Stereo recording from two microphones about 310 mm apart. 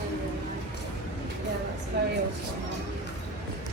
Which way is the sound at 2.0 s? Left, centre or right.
Right.